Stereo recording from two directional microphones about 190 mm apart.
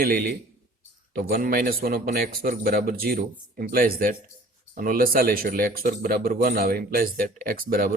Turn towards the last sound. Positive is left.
turn(degrees=-50)  # may be behind; listen again after turning